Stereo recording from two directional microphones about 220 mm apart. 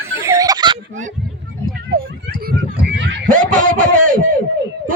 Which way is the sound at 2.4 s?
50° right (ahead or behind).